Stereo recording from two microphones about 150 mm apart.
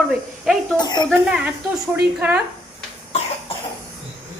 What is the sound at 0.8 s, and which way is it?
Speech, 25° left (ahead or behind).